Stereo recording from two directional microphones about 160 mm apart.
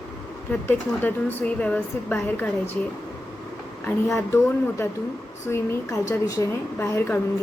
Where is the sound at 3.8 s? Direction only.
15° left (ahead or behind).